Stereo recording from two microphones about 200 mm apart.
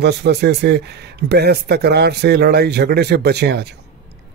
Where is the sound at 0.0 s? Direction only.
55° right (ahead or behind).